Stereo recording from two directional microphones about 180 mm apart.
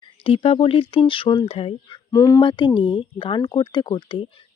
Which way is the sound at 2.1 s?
20° left (ahead or behind).